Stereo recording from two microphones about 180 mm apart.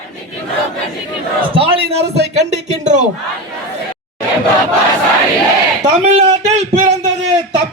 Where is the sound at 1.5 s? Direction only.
30° right (ahead or behind).